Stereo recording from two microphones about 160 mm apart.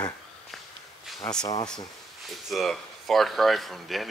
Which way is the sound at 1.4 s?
25° left (ahead or behind).